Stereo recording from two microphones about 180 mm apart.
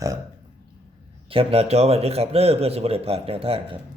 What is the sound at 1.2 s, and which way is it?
A man's voice, 30° right (ahead or behind).